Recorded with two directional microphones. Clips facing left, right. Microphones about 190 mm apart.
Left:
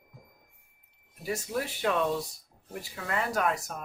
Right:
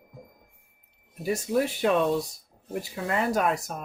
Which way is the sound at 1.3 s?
20° right (ahead or behind).